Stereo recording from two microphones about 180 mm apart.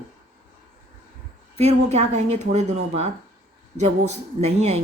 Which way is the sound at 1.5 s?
35° right (ahead or behind).